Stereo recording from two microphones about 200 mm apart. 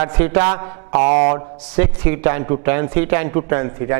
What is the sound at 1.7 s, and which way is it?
A man's voice, 10° right (ahead or behind).